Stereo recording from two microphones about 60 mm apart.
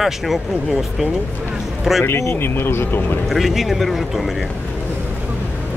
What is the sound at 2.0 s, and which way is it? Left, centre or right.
Speech, left.